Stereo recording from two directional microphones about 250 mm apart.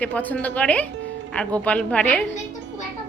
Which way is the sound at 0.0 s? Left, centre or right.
Centre.